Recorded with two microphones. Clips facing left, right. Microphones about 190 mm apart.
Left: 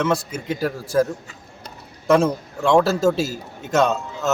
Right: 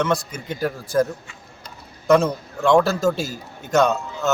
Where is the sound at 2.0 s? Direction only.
5° left (ahead or behind).